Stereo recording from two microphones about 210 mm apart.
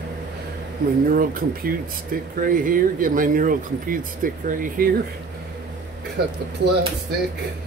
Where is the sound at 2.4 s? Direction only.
40° right (ahead or behind).